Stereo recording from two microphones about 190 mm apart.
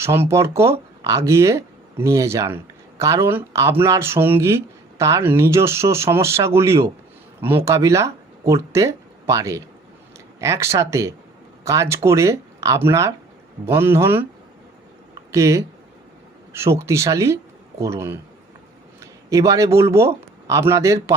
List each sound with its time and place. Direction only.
0.0 s speech: 15° right (ahead or behind)
15.3 s speech: 15° right (ahead or behind)
19.3 s speech: 15° right (ahead or behind)